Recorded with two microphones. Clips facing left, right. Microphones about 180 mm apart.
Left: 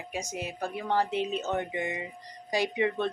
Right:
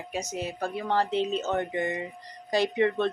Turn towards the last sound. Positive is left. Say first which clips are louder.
# right 3 dB
turn(degrees=10)  # may be behind; listen again after turning